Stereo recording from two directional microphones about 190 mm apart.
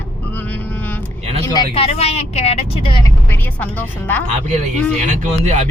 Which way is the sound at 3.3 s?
10° left (ahead or behind).